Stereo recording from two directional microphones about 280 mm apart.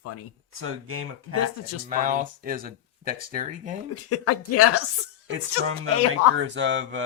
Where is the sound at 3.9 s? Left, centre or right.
Left.